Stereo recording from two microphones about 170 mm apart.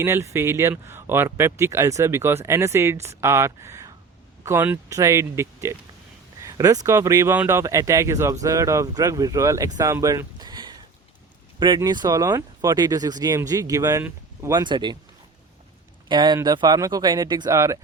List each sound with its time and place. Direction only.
0.0 s speech: 15° right (ahead or behind)
16.0 s speech: 25° right (ahead or behind)